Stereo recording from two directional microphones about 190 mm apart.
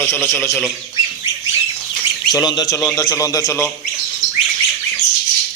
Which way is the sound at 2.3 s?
20° left (ahead or behind).